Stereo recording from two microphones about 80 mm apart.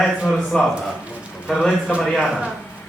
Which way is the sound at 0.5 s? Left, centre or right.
Centre.